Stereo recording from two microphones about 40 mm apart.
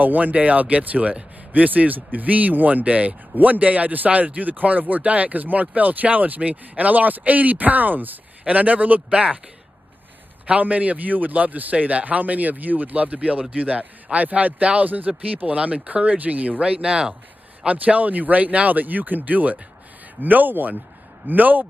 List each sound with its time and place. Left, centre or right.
0.0 s a man's voice: right
8.5 s a man's voice: right
10.4 s a man's voice: right
16.6 s speech: centre
17.6 s a man's voice: right